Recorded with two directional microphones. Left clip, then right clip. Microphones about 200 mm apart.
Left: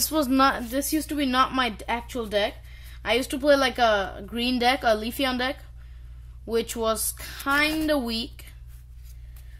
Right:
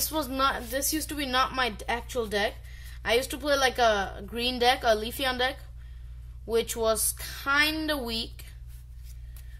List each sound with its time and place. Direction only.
0.0 s a woman's voice: 35° left (ahead or behind)